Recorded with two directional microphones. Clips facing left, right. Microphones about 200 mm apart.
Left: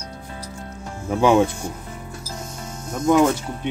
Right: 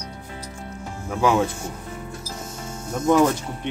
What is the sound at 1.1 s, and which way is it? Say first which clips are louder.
Speech: left 4 dB; 15° left (ahead or behind).